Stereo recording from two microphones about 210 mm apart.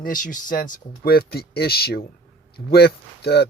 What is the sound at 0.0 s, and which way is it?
Speech, 40° left (ahead or behind).